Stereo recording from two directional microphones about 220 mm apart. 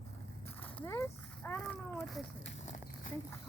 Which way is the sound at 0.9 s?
10° left (ahead or behind).